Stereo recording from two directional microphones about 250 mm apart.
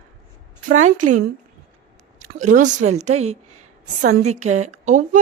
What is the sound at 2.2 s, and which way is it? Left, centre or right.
A woman's voice, right.